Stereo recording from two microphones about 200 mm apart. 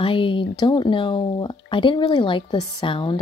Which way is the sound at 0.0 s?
25° left (ahead or behind).